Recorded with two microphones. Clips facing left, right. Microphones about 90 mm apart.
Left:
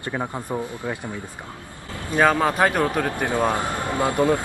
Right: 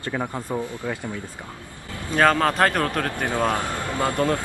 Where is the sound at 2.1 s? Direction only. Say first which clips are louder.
Even; 10° left (ahead or behind).